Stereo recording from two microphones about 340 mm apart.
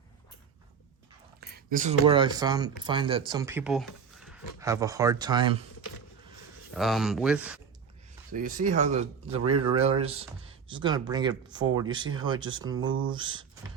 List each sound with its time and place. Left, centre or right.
1.4 s speech: right
6.7 s speech: centre
8.3 s speech: right
9.4 s speech: right
10.0 s speech: centre